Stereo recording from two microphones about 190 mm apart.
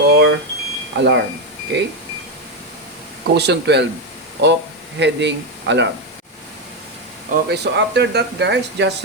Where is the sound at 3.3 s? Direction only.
60° right (ahead or behind).